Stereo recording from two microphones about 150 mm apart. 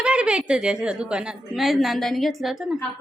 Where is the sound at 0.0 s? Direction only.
5° right (ahead or behind).